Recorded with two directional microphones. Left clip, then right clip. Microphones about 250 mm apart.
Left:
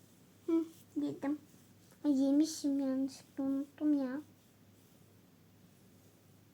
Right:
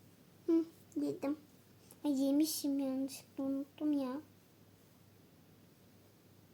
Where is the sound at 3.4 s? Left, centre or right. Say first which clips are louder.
Left 2 dB; centre.